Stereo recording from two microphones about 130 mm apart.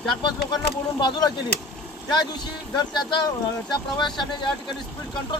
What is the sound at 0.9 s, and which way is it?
Speech, 35° left (ahead or behind).